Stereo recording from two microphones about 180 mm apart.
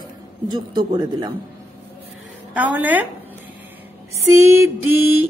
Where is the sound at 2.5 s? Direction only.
10° right (ahead or behind).